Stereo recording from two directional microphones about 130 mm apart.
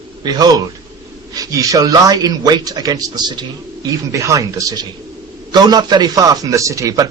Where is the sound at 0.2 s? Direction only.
30° right (ahead or behind).